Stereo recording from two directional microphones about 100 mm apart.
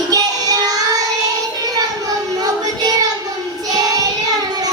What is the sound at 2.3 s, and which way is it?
Child singing, 40° right (ahead or behind).